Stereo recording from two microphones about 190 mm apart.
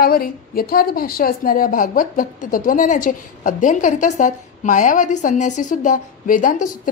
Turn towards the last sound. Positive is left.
turn(degrees=45)  # may be behind; listen again after turning